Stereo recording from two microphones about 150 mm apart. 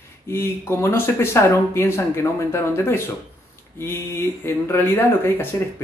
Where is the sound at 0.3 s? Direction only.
15° left (ahead or behind).